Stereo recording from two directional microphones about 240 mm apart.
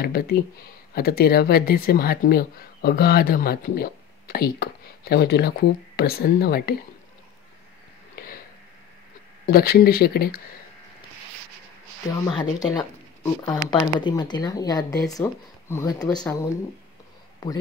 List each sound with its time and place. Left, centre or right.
0.0 s speech: left
9.5 s speech: left
12.3 s speech: centre